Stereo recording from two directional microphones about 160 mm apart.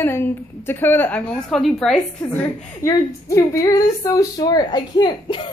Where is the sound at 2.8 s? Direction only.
20° left (ahead or behind).